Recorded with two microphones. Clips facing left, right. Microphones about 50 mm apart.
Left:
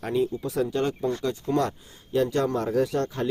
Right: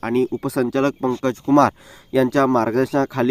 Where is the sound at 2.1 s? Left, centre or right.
Right.